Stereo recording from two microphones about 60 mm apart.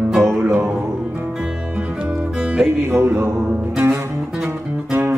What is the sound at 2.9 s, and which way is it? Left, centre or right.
Music, right.